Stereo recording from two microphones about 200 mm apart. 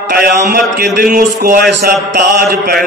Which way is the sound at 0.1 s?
50° right (ahead or behind).